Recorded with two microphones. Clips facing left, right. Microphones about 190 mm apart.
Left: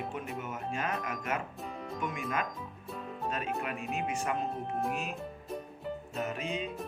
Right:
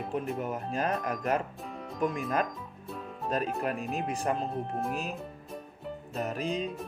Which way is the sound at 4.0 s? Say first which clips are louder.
Even; 35° right (ahead or behind).